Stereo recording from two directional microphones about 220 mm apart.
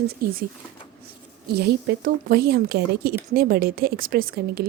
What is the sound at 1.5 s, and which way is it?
A woman's voice, 45° right (ahead or behind).